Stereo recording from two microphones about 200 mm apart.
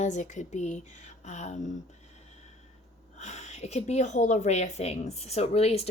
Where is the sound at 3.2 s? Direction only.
35° left (ahead or behind).